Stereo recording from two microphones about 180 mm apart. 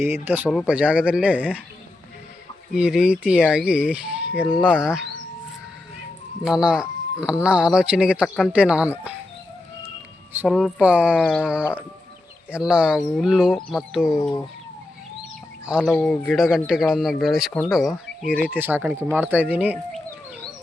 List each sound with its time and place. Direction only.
0.0 s speech: 10° right (ahead or behind)
2.7 s speech: 5° right (ahead or behind)
6.4 s speech: 5° right (ahead or behind)
10.4 s speech: 5° right (ahead or behind)
11.2 s a sound: 5° left (ahead or behind)
11.4 s speech: 5° right (ahead or behind)
14.1 s speech: 20° left (ahead or behind)
15.6 s speech: 5° right (ahead or behind)